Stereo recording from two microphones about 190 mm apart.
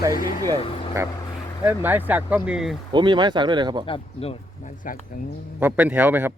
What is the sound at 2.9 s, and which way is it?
Speech, 25° right (ahead or behind).